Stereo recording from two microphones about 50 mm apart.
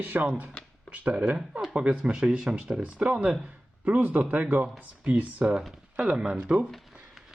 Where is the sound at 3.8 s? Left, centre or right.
Right.